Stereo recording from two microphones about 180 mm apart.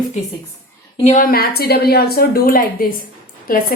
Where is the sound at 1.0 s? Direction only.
50° left (ahead or behind).